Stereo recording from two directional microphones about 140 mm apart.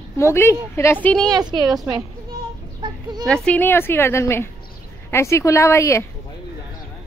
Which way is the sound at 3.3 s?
10° left (ahead or behind).